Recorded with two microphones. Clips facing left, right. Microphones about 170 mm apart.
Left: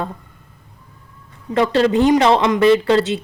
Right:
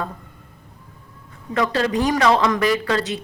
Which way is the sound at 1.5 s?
30° left (ahead or behind).